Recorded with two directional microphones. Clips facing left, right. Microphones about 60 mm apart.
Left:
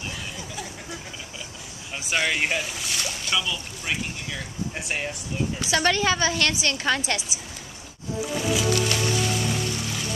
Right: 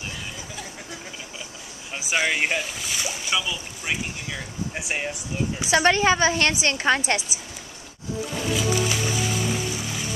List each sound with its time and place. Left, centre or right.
2.0 s speech: centre
5.9 s a woman's voice: right
8.4 s music: centre